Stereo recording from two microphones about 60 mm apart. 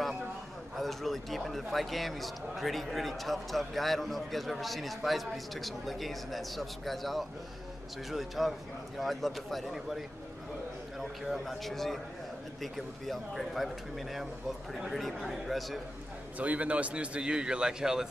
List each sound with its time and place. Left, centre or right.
0.7 s a man's voice: centre
16.3 s a man's voice: right